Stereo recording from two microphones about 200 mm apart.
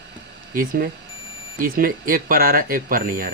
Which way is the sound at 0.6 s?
45° right (ahead or behind).